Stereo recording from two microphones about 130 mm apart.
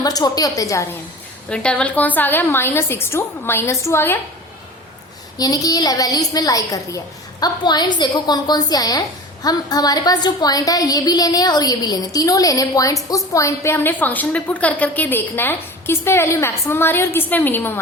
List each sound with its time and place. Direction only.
0.0 s a woman's voice: 30° left (ahead or behind)
1.5 s a woman's voice: 10° left (ahead or behind)
5.4 s a woman's voice: 30° left (ahead or behind)